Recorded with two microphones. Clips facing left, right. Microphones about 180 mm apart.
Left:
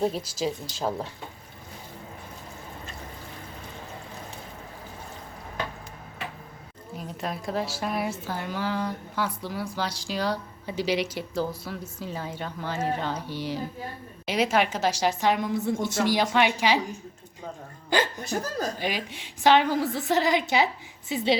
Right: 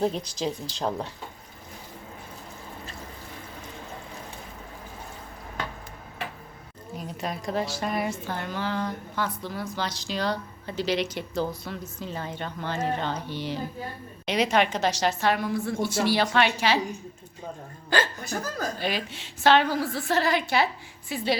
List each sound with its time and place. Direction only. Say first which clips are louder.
0.0 s a woman's voice: even; 5° left (ahead or behind)
6.9 s a woman's voice: even; centre (ahead or behind)
18.3 s a woman's voice: left 2 dB; 10° left (ahead or behind)